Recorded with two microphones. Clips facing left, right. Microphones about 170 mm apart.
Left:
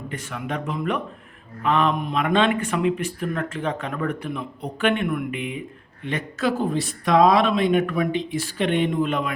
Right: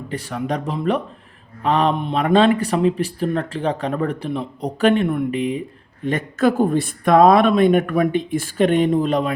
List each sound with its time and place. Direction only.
0.1 s speech: 35° right (ahead or behind)